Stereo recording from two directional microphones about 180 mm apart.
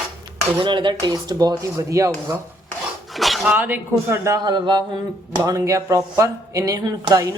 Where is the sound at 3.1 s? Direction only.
Centre (ahead or behind).